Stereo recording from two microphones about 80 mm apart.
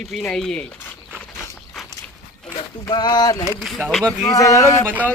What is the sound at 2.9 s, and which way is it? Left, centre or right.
Speech, left.